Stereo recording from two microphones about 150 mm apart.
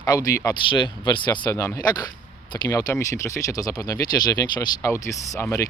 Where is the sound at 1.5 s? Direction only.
20° left (ahead or behind).